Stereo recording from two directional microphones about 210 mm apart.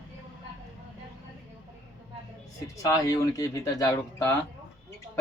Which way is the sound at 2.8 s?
15° left (ahead or behind).